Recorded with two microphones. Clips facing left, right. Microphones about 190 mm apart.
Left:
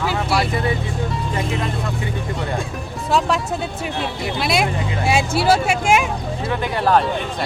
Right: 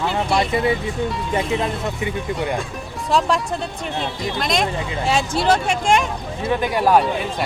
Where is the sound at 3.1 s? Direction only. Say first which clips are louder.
Even; centre (ahead or behind).